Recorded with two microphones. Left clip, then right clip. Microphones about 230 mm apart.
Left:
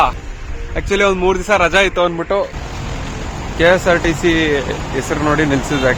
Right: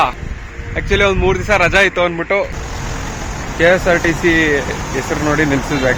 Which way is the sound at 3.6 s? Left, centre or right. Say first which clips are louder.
Even; centre.